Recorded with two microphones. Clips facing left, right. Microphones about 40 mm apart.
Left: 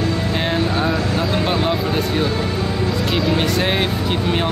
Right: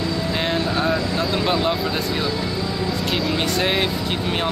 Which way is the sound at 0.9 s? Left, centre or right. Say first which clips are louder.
Left 2 dB; left.